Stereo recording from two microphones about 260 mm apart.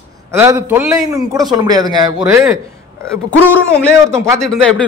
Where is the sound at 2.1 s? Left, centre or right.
Centre.